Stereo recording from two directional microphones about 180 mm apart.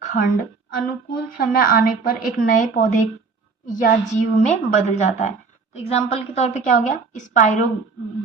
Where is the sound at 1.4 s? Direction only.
55° left (ahead or behind).